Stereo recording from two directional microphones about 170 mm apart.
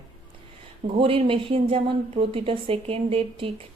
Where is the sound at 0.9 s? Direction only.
30° right (ahead or behind).